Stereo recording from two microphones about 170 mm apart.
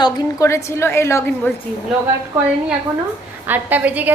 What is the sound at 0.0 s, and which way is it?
A woman's voice, 20° left (ahead or behind).